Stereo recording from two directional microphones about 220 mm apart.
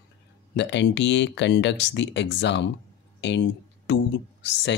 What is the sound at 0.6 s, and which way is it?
Speech, 50° left (ahead or behind).